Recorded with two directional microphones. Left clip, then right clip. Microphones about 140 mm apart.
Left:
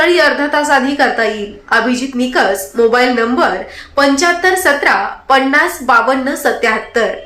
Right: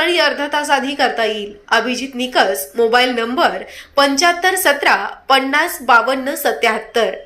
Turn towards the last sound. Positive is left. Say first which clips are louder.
# left 2 dB
turn(degrees=-20)  # may be behind; listen again after turning